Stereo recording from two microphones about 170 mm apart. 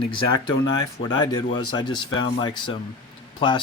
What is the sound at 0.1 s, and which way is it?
Speech, 25° left (ahead or behind).